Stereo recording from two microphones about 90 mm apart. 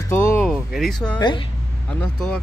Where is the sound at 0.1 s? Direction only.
30° left (ahead or behind).